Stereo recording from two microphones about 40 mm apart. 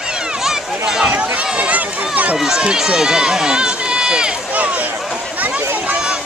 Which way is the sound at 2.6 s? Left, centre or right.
Right.